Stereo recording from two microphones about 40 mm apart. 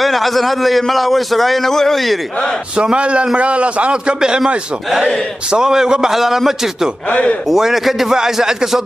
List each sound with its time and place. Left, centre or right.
0.0 s a man's voice: centre
2.7 s a man's voice: right
4.9 s a man's voice: centre
5.5 s a man's voice: centre
7.1 s speech: left
7.4 s a man's voice: centre